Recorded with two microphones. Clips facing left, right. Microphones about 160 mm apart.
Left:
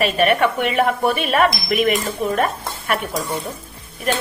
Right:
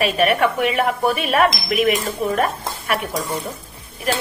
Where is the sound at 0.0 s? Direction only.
Centre (ahead or behind).